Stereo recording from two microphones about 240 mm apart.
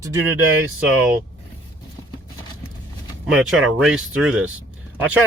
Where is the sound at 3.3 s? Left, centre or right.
Centre.